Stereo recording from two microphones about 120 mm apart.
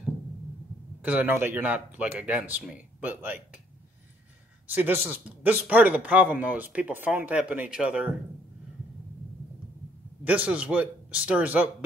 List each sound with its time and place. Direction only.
1.0 s speech: 15° right (ahead or behind)
4.6 s speech: 15° right (ahead or behind)
10.2 s speech: 10° right (ahead or behind)